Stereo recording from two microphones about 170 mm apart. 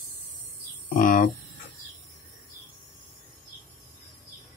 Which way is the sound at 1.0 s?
50° left (ahead or behind).